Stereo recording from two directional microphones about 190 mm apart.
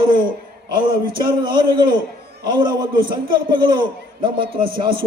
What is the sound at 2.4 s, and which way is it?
A man's voice, 25° right (ahead or behind).